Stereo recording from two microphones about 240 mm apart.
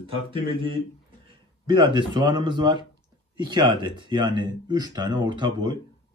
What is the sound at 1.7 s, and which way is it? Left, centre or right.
Speech, centre.